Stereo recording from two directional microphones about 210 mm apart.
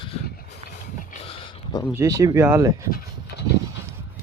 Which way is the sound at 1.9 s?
15° right (ahead or behind).